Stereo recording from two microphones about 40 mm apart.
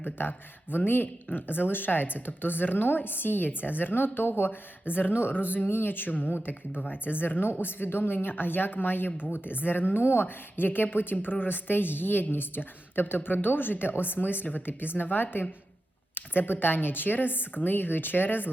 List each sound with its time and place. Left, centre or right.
0.0 s a woman's voice: left
5.3 s a woman's voice: left
6.3 s a woman's voice: left